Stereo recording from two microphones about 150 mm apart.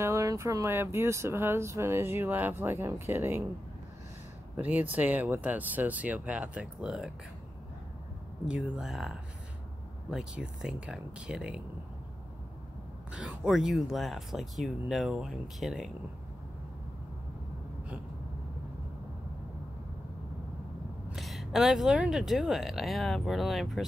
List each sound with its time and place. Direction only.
0.0 s speech: 20° right (ahead or behind)
4.6 s speech: 10° right (ahead or behind)
8.5 s speech: 5° right (ahead or behind)
13.1 s speech: 5° right (ahead or behind)
21.1 s speech: centre (ahead or behind)